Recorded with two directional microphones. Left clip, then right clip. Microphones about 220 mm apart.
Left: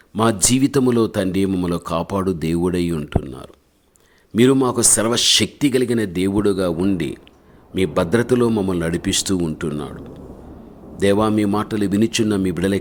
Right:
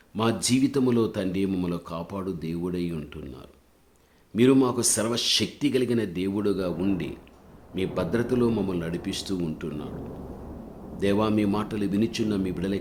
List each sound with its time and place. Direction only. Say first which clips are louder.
0.1 s speech: left 7 dB; 35° left (ahead or behind)
11.0 s speech: left 7 dB; 35° left (ahead or behind)